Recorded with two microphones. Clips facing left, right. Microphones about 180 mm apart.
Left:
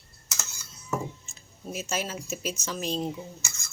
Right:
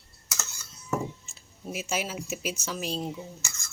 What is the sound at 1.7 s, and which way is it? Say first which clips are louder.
A woman's voice: even; 10° right (ahead or behind).